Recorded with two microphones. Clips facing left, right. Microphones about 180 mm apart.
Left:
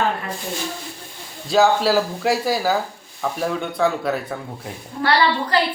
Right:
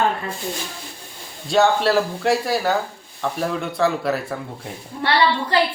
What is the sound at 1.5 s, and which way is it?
Speech, centre (ahead or behind).